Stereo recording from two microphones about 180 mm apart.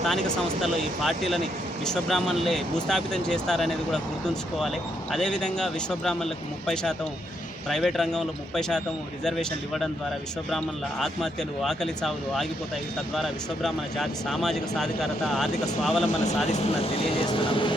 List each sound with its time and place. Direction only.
0.6 s speech: centre (ahead or behind)
5.1 s speech: 5° left (ahead or behind)
11.0 s speech: centre (ahead or behind)
16.5 s speech: 35° left (ahead or behind)